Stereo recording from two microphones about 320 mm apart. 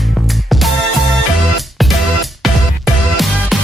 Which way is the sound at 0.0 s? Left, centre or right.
Centre.